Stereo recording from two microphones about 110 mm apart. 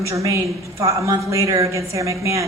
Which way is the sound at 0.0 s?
30° right (ahead or behind).